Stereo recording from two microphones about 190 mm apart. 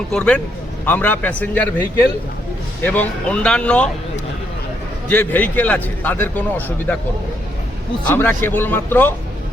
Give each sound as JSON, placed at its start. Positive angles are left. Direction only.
{"t": 0.1, "sound": "a man's voice", "side_deg": 5}
{"t": 5.0, "sound": "a man's voice", "side_deg": 10}
{"t": 8.0, "sound": "a man's voice", "side_deg": 10}